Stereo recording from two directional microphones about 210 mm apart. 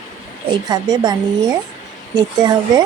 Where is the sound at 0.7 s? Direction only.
20° right (ahead or behind).